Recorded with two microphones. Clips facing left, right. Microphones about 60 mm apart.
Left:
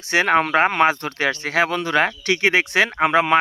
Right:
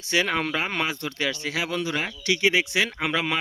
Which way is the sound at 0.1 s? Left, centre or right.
Left.